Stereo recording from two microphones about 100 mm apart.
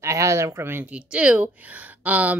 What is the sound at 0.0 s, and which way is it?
Speech, 30° right (ahead or behind).